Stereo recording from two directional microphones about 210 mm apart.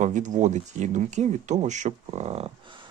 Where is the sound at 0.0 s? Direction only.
35° right (ahead or behind).